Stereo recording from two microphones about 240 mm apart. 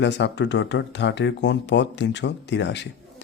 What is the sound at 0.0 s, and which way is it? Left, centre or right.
Speech, left.